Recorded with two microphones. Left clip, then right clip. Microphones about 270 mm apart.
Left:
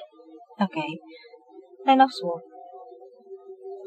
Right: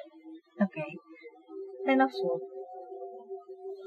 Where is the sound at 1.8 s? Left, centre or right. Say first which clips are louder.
Left 8 dB; left.